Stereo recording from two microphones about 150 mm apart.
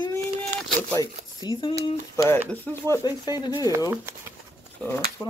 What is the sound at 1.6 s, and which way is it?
Speech, 35° left (ahead or behind).